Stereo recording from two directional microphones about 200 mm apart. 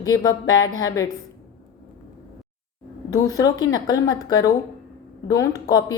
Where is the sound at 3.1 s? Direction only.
20° left (ahead or behind).